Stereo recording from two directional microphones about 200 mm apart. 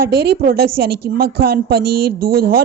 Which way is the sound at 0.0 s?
50° right (ahead or behind).